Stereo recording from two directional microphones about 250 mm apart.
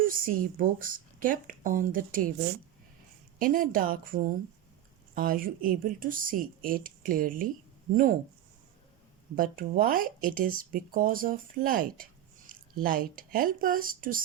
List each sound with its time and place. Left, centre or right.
0.0 s speech: right
3.3 s speech: right
9.3 s speech: right